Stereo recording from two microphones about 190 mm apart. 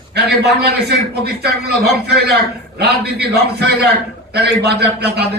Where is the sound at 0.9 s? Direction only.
60° right (ahead or behind).